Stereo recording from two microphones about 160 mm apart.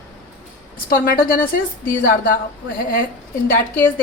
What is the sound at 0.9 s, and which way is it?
A woman's voice, 60° left (ahead or behind).